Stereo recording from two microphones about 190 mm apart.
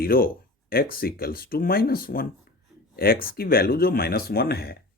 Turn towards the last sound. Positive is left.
turn(degrees=55)  # may be behind; listen again after turning